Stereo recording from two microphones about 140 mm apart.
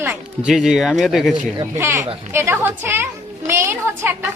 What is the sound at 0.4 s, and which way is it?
Speech, 5° right (ahead or behind).